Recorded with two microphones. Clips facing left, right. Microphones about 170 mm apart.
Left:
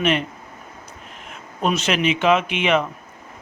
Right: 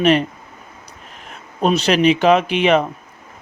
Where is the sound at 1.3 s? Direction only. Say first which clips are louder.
Right 5 dB; 35° right (ahead or behind).